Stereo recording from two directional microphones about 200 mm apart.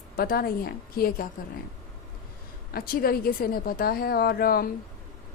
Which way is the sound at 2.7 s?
50° left (ahead or behind).